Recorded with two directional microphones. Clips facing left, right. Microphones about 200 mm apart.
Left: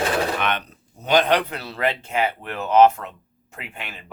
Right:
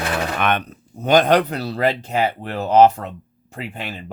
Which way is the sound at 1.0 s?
45° right (ahead or behind).